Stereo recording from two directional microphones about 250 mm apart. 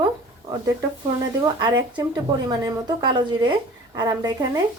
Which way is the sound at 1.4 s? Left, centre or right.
Centre.